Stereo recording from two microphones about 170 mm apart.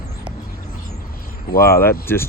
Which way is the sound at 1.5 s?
60° left (ahead or behind).